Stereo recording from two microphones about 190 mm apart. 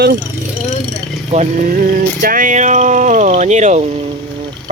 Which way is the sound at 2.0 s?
45° right (ahead or behind).